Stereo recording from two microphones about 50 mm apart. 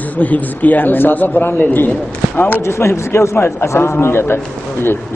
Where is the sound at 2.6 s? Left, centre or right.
Left.